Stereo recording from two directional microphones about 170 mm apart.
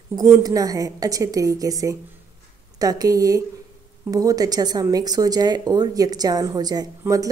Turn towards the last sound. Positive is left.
turn(degrees=-20)  # may be behind; listen again after turning